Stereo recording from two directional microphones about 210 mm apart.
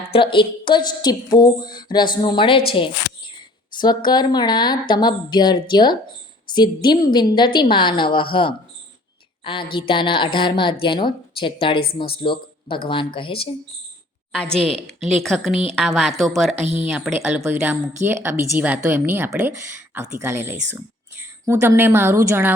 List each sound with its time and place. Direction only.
0.2 s a woman's voice: 25° left (ahead or behind)
9.4 s a sound: 25° left (ahead or behind)
9.7 s a woman's voice: 25° left (ahead or behind)
14.3 s speech: 5° left (ahead or behind)
16.6 s speech: 30° right (ahead or behind)
16.9 s a woman's voice: 5° right (ahead or behind)